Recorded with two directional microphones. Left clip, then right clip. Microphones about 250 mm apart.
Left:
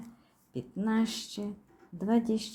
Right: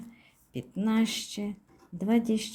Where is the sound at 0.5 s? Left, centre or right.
Centre.